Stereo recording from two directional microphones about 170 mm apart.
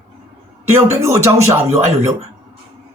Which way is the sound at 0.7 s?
15° right (ahead or behind).